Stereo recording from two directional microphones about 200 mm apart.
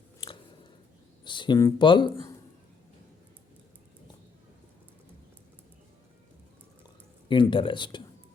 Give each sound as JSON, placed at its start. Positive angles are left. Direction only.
{"t": 0.2, "sound": "a sound", "side_deg": 25}
{"t": 1.2, "sound": "speech", "side_deg": 25}
{"t": 7.3, "sound": "speech", "side_deg": 25}